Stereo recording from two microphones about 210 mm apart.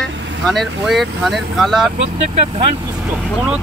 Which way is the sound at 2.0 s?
25° right (ahead or behind).